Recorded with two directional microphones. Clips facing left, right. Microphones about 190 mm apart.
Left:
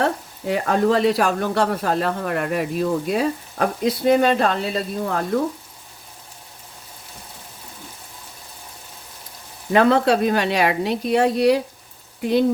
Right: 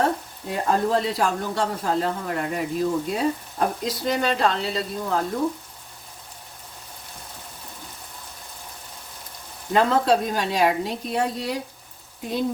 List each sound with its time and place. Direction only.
0.0 s speech: 80° left; by 5.2 s 55° left (ahead or behind)
9.7 s speech: 70° left (ahead or behind)